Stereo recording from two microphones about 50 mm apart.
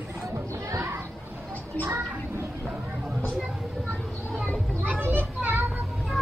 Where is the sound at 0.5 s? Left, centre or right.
Right.